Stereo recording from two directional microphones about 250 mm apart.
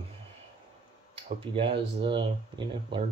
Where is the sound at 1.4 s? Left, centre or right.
Right.